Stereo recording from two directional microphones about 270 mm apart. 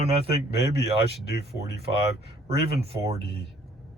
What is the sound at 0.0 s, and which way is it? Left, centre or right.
Speech, right.